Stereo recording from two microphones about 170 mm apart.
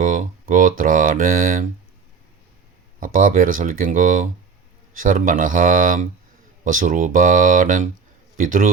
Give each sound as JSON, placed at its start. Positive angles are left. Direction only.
{"t": 0.0, "sound": "speech", "side_deg": -50}
{"t": 3.0, "sound": "speech", "side_deg": -50}